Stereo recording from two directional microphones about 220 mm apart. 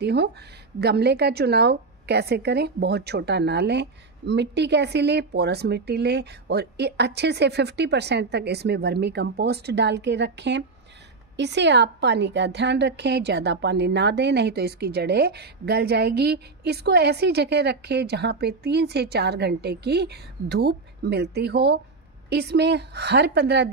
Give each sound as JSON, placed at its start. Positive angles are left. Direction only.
{"t": 0.0, "sound": "a woman's voice", "side_deg": -50}